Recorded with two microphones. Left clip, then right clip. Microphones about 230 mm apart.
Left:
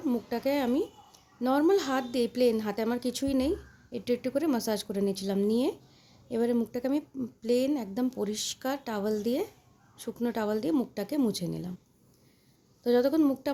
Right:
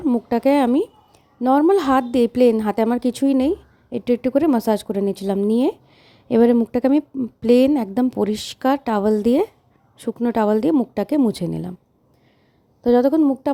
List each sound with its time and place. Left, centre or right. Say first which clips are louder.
0.0 s a woman's voice: right 11 dB; right
12.8 s speech: right 9 dB; right